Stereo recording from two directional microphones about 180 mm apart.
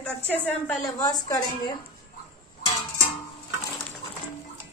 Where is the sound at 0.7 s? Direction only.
15° left (ahead or behind).